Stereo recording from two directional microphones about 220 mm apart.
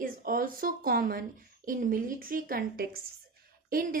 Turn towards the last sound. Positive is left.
turn(degrees=-40)  # may be behind; listen again after turning